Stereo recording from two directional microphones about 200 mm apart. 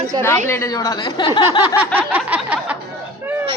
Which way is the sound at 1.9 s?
10° right (ahead or behind).